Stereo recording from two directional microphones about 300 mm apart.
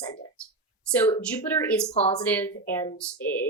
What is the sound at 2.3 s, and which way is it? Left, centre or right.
Speech, centre.